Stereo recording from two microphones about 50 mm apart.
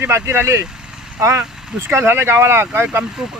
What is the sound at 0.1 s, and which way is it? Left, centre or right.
Speech, right.